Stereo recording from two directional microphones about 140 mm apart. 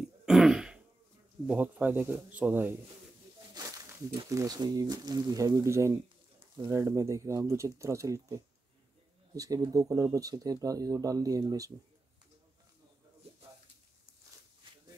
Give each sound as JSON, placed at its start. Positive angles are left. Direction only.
{"t": 0.2, "sound": "throat clearing", "side_deg": -5}
{"t": 1.5, "sound": "speech", "side_deg": -10}
{"t": 3.5, "sound": "a sound", "side_deg": -25}
{"t": 4.3, "sound": "speech", "side_deg": -25}